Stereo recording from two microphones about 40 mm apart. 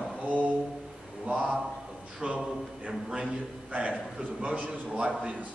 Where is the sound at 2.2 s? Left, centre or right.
Right.